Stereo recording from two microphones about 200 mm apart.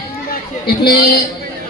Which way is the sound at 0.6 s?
55° left (ahead or behind).